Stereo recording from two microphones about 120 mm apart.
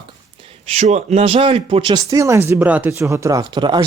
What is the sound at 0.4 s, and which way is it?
Speech, 55° right (ahead or behind).